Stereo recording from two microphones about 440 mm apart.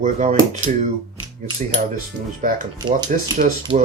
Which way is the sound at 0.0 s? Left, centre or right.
Centre.